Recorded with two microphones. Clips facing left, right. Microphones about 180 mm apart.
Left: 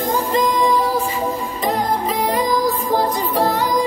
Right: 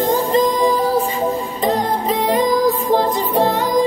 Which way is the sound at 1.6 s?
25° right (ahead or behind).